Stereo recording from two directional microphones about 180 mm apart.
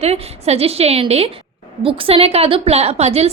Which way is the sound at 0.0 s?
35° right (ahead or behind).